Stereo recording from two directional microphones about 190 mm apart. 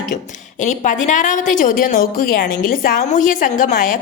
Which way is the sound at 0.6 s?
40° left (ahead or behind).